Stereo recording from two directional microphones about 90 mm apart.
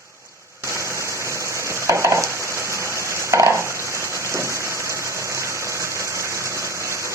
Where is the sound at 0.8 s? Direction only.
30° right (ahead or behind).